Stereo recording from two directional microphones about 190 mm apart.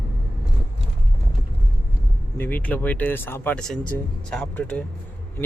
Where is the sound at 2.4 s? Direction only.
10° left (ahead or behind).